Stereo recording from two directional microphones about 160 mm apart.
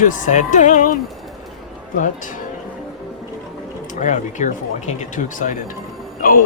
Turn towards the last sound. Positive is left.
turn(degrees=60)  # may be behind; listen again after turning